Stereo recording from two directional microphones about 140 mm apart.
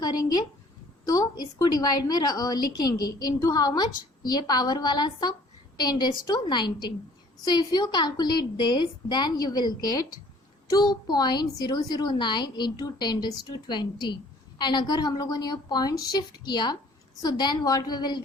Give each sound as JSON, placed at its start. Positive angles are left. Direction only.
{"t": 1.0, "sound": "a woman's voice", "side_deg": 25}